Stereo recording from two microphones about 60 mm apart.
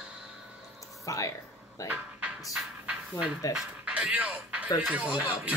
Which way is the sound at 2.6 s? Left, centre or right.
Centre.